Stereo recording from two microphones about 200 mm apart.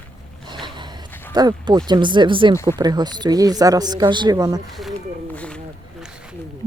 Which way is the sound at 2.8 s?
20° right (ahead or behind).